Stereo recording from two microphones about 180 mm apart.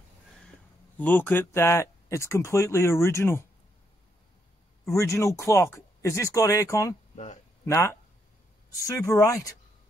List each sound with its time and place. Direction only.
0.9 s speech: 10° left (ahead or behind)
4.9 s speech: 15° left (ahead or behind)